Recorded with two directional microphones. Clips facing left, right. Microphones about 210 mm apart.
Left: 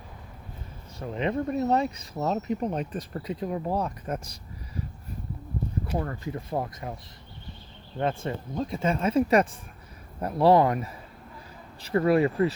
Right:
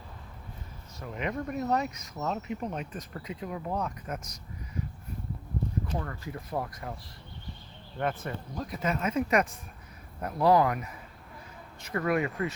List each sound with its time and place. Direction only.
0.9 s speech: 30° left (ahead or behind)
6.2 s speech: 25° left (ahead or behind)
7.9 s speech: 25° left (ahead or behind)